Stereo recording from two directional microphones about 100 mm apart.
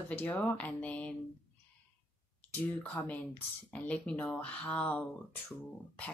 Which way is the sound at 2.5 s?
15° left (ahead or behind).